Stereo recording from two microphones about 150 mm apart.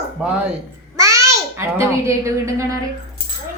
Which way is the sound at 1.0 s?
20° right (ahead or behind).